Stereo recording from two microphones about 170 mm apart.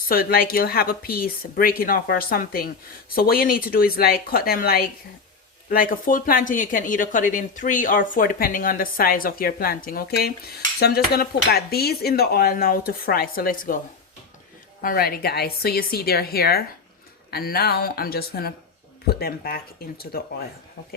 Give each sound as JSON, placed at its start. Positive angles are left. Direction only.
{"t": 0.1, "sound": "speech", "side_deg": 60}
{"t": 14.8, "sound": "speech", "side_deg": 60}